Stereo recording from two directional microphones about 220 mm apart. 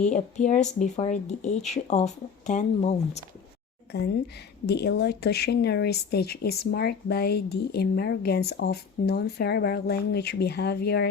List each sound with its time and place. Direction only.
0.1 s speech: 35° left (ahead or behind)
4.6 s speech: 50° left (ahead or behind)